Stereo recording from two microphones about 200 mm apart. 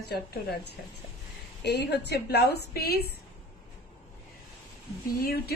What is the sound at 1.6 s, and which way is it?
A woman's voice, 55° left (ahead or behind).